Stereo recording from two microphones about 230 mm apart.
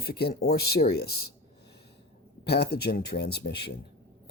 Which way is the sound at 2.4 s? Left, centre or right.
Left.